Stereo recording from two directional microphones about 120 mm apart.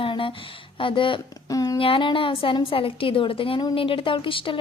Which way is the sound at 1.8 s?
45° left (ahead or behind).